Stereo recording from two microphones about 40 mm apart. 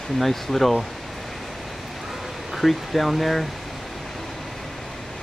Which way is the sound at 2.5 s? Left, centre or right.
Centre.